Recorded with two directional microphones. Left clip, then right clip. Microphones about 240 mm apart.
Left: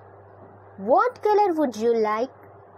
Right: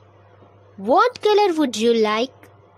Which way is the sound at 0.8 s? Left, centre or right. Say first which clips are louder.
Right 3 dB; right.